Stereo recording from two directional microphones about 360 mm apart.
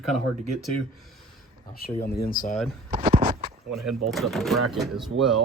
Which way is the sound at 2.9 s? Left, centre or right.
Right.